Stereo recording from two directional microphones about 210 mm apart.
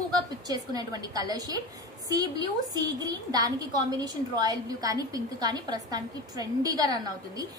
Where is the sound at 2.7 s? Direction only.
20° right (ahead or behind).